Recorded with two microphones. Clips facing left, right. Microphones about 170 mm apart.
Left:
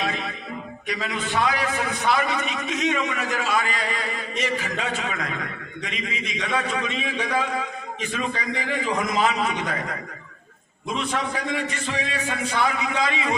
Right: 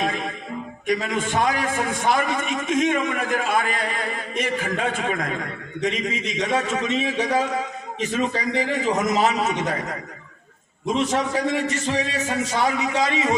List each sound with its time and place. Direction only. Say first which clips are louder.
0.0 s music: right 3 dB; 45° right (ahead or behind)
0.9 s a man's voice: right 6 dB; 45° right (ahead or behind)
11.1 s a man's voice: right 5 dB; 45° right (ahead or behind)